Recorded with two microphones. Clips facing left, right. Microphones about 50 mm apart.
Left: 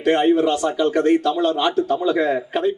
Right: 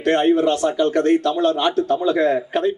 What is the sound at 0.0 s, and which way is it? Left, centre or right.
Speech, centre.